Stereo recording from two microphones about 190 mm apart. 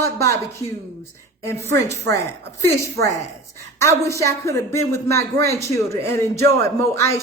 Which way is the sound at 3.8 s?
15° left (ahead or behind).